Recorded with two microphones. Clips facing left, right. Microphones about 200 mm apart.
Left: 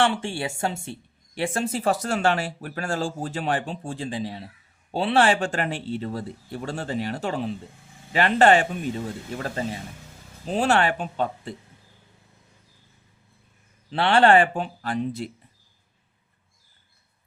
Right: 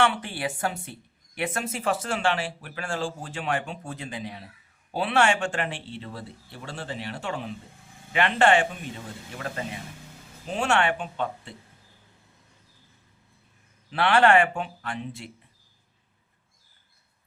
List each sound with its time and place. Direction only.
0.0 s a woman's voice: 30° left (ahead or behind)
13.9 s speech: 30° left (ahead or behind)